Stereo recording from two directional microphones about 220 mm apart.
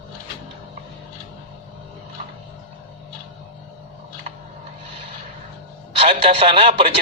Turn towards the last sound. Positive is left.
turn(degrees=-25)  # may be behind; listen again after turning